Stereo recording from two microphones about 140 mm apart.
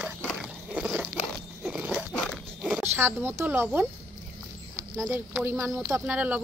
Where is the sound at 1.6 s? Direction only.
5° right (ahead or behind).